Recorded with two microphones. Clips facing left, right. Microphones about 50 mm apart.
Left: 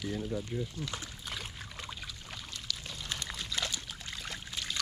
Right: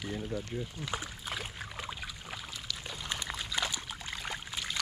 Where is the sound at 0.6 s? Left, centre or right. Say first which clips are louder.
Right 1 dB; centre.